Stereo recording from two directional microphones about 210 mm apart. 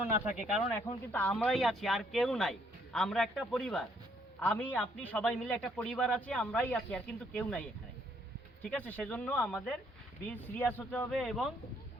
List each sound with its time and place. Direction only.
0.3 s a man's voice: centre (ahead or behind)